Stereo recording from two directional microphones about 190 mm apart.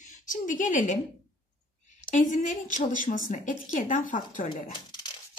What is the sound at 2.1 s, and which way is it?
A woman's voice, 40° left (ahead or behind).